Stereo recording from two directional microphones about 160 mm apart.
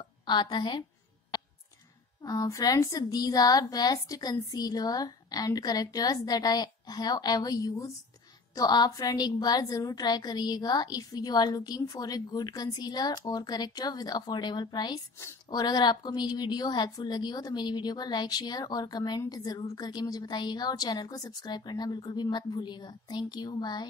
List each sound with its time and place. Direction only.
0.0 s a woman's voice: 30° left (ahead or behind)
1.3 s clicking: 25° left (ahead or behind)
2.2 s a woman's voice: 20° left (ahead or behind)